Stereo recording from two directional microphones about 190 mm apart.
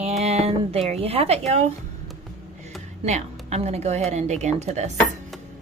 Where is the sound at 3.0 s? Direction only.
35° right (ahead or behind).